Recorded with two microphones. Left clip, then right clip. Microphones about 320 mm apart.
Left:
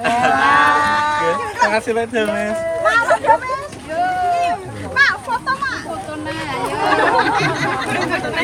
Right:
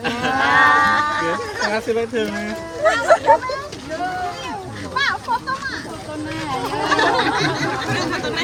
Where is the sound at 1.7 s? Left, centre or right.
Centre.